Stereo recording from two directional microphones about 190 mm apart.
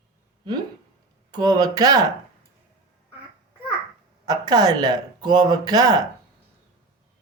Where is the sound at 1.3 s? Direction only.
20° right (ahead or behind).